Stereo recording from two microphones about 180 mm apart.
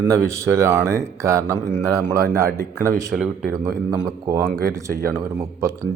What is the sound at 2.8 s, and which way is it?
Speech, 15° right (ahead or behind).